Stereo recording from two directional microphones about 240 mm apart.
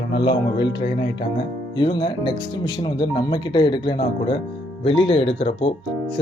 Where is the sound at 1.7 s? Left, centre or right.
Left.